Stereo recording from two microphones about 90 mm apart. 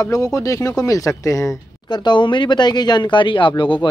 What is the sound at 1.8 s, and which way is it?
Speech, 55° left (ahead or behind).